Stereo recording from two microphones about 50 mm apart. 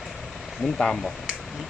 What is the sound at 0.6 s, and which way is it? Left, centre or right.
Speech, centre.